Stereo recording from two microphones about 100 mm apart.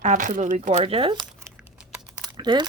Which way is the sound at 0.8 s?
65° right (ahead or behind).